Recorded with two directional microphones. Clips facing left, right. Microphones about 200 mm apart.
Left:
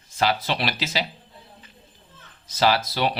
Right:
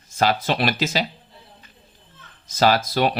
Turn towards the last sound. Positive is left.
turn(degrees=-50)  # may be behind; listen again after turning